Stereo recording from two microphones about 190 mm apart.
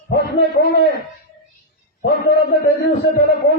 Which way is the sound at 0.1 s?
55° left (ahead or behind).